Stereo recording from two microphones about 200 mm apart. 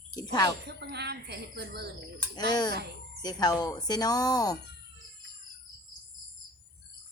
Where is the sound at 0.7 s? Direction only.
55° right (ahead or behind).